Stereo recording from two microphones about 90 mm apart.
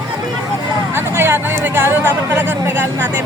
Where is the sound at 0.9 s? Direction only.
30° right (ahead or behind).